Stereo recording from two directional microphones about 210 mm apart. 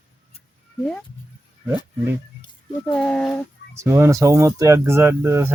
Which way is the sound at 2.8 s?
5° left (ahead or behind).